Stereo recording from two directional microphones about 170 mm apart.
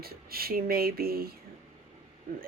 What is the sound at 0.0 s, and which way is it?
Speech, 65° right (ahead or behind).